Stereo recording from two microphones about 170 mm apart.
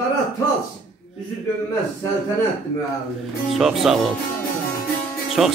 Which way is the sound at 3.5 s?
Centre (ahead or behind).